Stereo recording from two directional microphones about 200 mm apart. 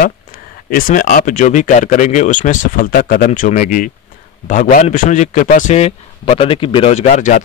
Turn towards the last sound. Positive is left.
turn(degrees=40)  # may be behind; listen again after turning